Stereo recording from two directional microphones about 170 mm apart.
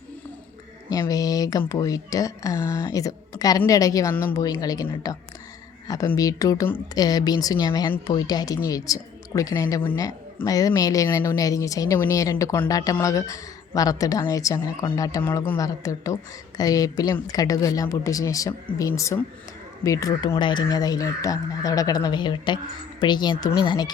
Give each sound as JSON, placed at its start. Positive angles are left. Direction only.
{"t": 0.9, "sound": "a woman's voice", "side_deg": 20}
{"t": 6.1, "sound": "a woman's voice", "side_deg": 20}